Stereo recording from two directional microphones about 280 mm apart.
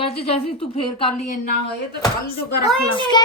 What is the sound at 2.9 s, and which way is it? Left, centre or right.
Speech, centre.